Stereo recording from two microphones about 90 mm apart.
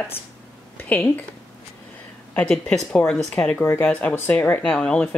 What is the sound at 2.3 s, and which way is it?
Speech, 5° left (ahead or behind).